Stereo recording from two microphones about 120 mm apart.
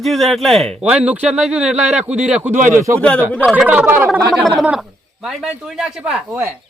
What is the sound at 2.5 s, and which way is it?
Speech, 90° right.